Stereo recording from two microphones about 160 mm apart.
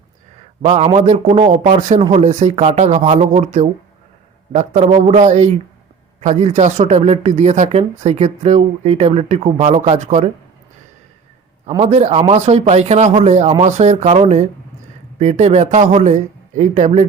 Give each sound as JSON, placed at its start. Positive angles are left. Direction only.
{"t": 0.6, "sound": "speech", "side_deg": -40}
{"t": 11.8, "sound": "a man's voice", "side_deg": -40}